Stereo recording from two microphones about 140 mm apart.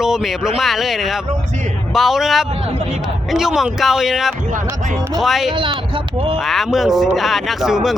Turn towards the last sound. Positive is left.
turn(degrees=-5)  # may be behind; listen again after turning